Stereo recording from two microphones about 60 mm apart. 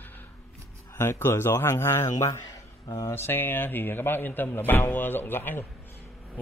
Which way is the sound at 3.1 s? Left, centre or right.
Left.